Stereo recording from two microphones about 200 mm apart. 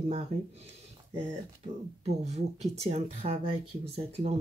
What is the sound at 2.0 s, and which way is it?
Speech, 35° right (ahead or behind).